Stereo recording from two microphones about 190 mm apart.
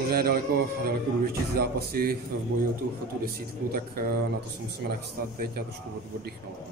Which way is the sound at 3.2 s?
50° right (ahead or behind).